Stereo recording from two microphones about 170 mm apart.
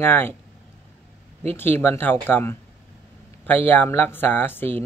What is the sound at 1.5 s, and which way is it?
Speech, 10° left (ahead or behind).